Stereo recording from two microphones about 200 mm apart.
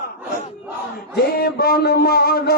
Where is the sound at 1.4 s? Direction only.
50° left (ahead or behind).